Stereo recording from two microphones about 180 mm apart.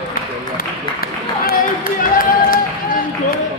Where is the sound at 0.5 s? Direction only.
55° left (ahead or behind).